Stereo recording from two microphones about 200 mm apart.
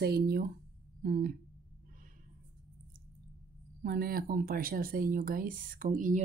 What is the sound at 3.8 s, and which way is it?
Speech, 50° right (ahead or behind).